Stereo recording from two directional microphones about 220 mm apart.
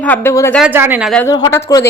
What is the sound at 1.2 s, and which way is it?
Speech, 15° left (ahead or behind).